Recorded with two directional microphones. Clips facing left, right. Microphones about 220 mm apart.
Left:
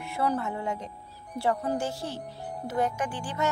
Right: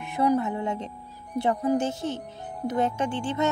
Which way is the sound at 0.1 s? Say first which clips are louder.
Right 5 dB; 15° right (ahead or behind).